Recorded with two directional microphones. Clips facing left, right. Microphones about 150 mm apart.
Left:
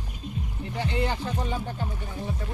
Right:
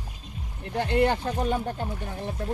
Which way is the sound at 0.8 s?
60° right (ahead or behind).